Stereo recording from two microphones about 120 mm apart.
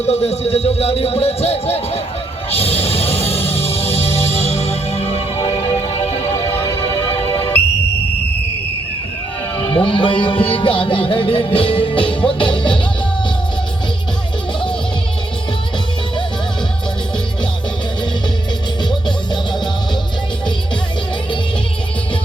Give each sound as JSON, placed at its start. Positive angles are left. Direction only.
{"t": 0.0, "sound": "a man's voice", "side_deg": 60}
{"t": 2.5, "sound": "music", "side_deg": 55}
{"t": 7.1, "sound": "music", "side_deg": 45}
{"t": 9.6, "sound": "speech", "side_deg": 45}